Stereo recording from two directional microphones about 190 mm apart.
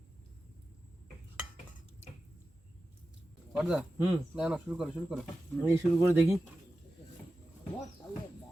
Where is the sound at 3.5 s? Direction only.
5° right (ahead or behind).